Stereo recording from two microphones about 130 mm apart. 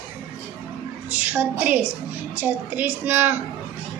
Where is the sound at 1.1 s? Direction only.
10° right (ahead or behind).